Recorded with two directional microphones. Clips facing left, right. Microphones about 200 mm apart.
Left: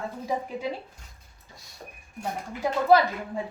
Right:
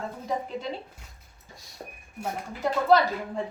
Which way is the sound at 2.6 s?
10° left (ahead or behind).